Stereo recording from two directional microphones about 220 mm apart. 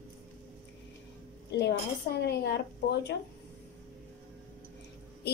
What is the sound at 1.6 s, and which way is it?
Speech, 45° left (ahead or behind).